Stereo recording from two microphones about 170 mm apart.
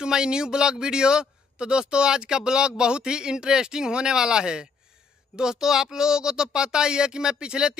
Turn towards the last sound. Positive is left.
turn(degrees=-5)  # may be behind; listen again after turning